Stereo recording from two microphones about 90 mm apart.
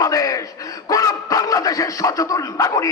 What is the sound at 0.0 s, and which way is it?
A man's voice, 40° left (ahead or behind).